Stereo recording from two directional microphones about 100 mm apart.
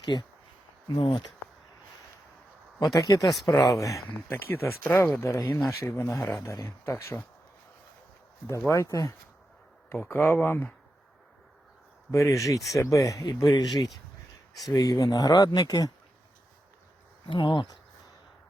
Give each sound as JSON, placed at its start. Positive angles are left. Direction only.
{"t": 0.0, "sound": "speech", "side_deg": 45}
{"t": 0.9, "sound": "speech", "side_deg": 60}
{"t": 2.8, "sound": "speech", "side_deg": 40}
{"t": 8.4, "sound": "speech", "side_deg": 25}
{"t": 10.1, "sound": "speech", "side_deg": 25}
{"t": 12.1, "sound": "speech", "side_deg": 30}
{"t": 13.2, "sound": "speech", "side_deg": 45}
{"t": 14.7, "sound": "speech", "side_deg": 40}
{"t": 17.2, "sound": "speech", "side_deg": 55}